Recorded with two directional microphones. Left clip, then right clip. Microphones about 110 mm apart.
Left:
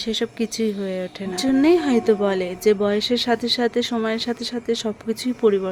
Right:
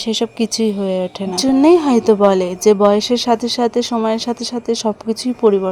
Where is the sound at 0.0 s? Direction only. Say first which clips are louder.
Right 5 dB; 40° right (ahead or behind).